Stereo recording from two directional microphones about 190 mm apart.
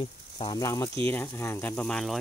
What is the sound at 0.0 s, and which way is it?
Speech, 25° left (ahead or behind).